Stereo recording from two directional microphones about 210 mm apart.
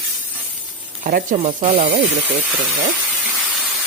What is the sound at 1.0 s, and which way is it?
Speech, 40° right (ahead or behind).